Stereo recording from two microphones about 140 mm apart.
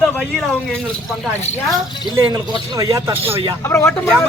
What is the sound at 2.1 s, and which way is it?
Speech, 25° right (ahead or behind).